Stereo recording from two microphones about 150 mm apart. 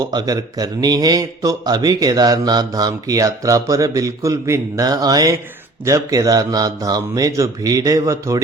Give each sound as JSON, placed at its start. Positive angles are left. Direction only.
{"t": 0.0, "sound": "a man's voice", "side_deg": -25}